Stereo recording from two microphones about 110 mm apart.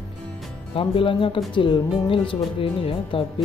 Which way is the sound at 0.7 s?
55° left (ahead or behind).